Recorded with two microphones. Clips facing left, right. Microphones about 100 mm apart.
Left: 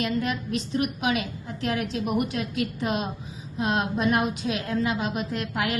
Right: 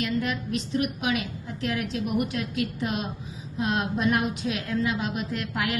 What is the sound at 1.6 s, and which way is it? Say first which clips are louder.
Speech: left 2 dB; 30° left (ahead or behind).